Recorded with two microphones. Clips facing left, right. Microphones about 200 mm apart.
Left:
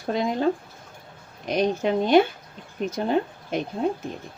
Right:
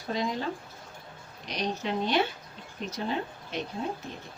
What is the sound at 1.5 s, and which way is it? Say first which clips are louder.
Speech: left 9 dB; 50° left (ahead or behind).